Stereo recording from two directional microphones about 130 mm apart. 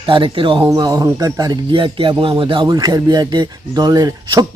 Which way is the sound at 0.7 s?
30° right (ahead or behind).